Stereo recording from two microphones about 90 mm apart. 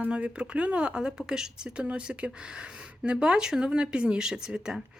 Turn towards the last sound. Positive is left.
turn(degrees=-10)  # may be behind; listen again after turning